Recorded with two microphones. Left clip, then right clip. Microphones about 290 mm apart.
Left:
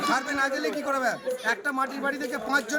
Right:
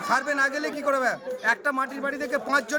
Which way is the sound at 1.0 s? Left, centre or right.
Centre.